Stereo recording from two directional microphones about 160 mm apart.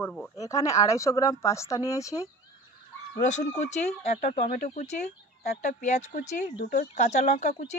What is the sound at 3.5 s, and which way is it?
Speech, 45° left (ahead or behind).